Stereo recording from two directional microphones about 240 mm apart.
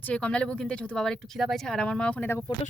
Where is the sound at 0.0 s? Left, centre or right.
Centre.